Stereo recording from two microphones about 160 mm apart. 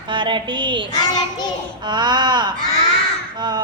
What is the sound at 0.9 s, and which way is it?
Speech, 25° left (ahead or behind).